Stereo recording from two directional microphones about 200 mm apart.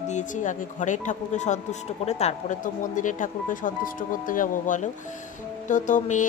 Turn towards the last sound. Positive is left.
turn(degrees=40)  # may be behind; listen again after turning